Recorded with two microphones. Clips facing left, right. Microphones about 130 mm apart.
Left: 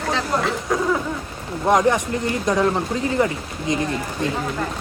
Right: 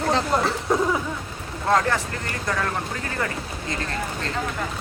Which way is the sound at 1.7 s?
15° left (ahead or behind).